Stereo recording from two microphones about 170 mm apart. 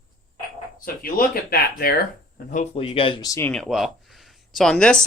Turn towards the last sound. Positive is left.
turn(degrees=5)  # may be behind; listen again after turning